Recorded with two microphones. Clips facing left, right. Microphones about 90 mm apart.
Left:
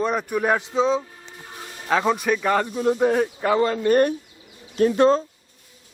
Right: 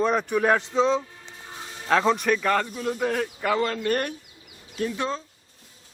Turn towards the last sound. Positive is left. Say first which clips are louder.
# left 11 dB
turn(degrees=45)  # may be behind; listen again after turning